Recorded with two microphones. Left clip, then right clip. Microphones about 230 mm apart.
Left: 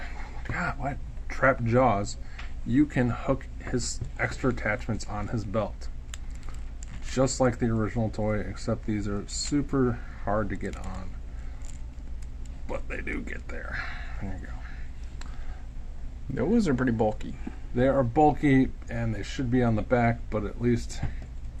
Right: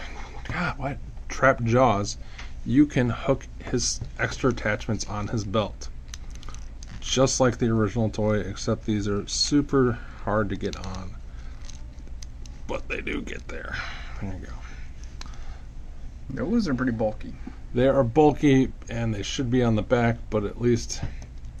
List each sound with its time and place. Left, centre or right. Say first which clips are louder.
0.1 s a sound: right 2 dB; right
2.7 s speech: right 4 dB; right
7.1 s speech: right 4 dB; right
12.6 s speech: right 4 dB; right
16.3 s speech: left 1 dB; left
17.7 s speech: right 3 dB; right
18.9 s speech: right 4 dB; right